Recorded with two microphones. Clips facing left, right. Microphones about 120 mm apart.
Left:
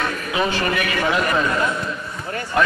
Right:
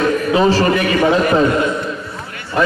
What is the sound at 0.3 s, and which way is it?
A man's voice, 35° right (ahead or behind).